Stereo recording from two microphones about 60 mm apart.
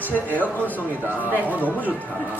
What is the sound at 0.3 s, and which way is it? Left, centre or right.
A man's voice, left.